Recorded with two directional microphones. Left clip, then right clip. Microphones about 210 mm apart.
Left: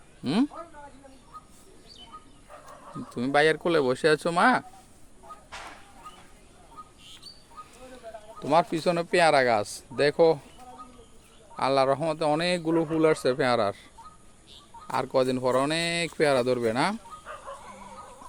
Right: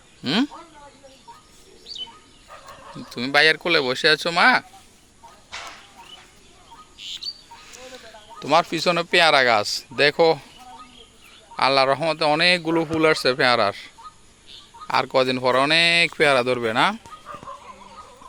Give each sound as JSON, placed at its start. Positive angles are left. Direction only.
{"t": 0.2, "sound": "a man's voice", "side_deg": 0}
{"t": 3.1, "sound": "speech", "side_deg": 15}
{"t": 7.7, "sound": "speech", "side_deg": 5}
{"t": 11.5, "sound": "a man's voice", "side_deg": 0}